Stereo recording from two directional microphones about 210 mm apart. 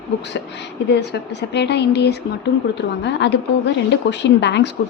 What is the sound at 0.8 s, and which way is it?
A woman's voice, 55° left (ahead or behind).